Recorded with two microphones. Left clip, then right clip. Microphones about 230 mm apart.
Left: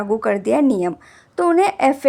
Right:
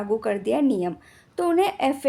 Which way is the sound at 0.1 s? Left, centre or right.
Centre.